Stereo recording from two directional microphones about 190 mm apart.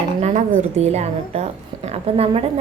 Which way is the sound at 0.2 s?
35° right (ahead or behind).